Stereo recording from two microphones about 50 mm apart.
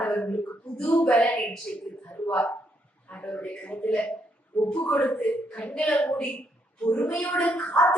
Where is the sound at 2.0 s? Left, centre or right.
Left.